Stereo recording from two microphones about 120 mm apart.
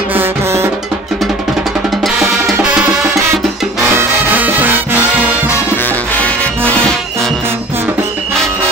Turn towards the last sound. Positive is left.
turn(degrees=10)  # may be behind; listen again after turning